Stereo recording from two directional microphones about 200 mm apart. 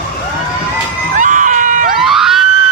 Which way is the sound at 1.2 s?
40° right (ahead or behind).